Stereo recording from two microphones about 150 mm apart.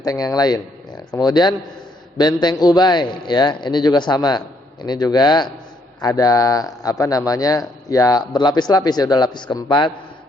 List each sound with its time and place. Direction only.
0.0 s speech: 25° left (ahead or behind)